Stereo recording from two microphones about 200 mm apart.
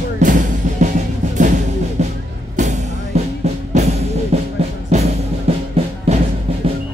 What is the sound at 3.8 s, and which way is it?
Music, 35° right (ahead or behind).